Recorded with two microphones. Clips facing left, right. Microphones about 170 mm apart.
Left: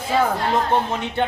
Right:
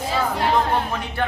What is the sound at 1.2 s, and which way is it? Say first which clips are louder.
Speech: left 2 dB; 25° left (ahead or behind).